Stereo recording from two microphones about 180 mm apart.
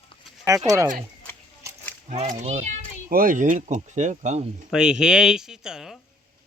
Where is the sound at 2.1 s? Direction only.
40° right (ahead or behind).